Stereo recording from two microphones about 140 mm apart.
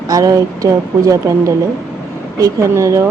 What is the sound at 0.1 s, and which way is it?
A woman's voice, 25° right (ahead or behind).